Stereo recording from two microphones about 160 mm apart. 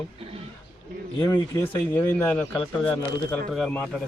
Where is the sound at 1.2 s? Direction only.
25° left (ahead or behind).